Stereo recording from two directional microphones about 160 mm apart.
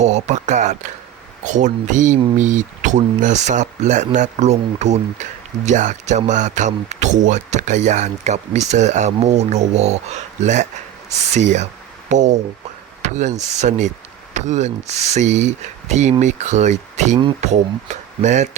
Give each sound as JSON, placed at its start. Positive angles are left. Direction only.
{"t": 0.0, "sound": "speech", "side_deg": -45}